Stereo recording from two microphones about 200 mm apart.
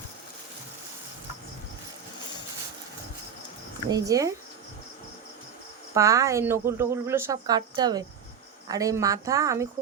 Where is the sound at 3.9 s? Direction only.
15° right (ahead or behind).